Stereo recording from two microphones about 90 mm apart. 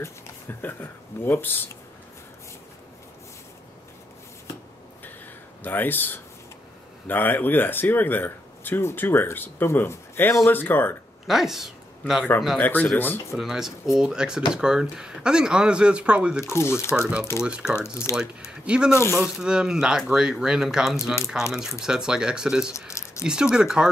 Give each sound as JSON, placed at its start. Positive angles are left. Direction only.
{"t": 0.0, "sound": "speech", "side_deg": 25}
{"t": 5.6, "sound": "speech", "side_deg": 20}
{"t": 11.2, "sound": "speech", "side_deg": -5}
{"t": 12.5, "sound": "speech", "side_deg": 20}
{"t": 13.4, "sound": "speech", "side_deg": -5}
{"t": 16.4, "sound": "speech", "side_deg": 30}
{"t": 17.4, "sound": "speech", "side_deg": -10}
{"t": 17.7, "sound": "speech", "side_deg": 30}
{"t": 18.1, "sound": "speech", "side_deg": -10}
{"t": 18.9, "sound": "speech", "side_deg": 30}
{"t": 19.2, "sound": "speech", "side_deg": -5}
{"t": 20.9, "sound": "speech", "side_deg": 30}
{"t": 21.5, "sound": "speech", "side_deg": -5}